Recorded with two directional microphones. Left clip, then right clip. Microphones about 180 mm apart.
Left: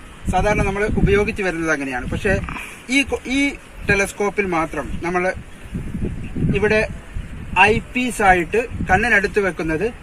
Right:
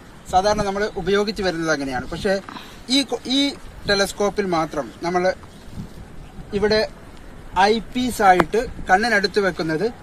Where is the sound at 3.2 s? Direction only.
20° left (ahead or behind).